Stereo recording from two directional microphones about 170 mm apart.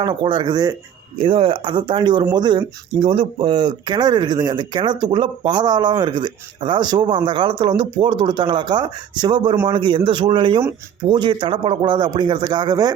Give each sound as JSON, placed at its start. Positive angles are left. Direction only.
{"t": 0.0, "sound": "speech", "side_deg": -25}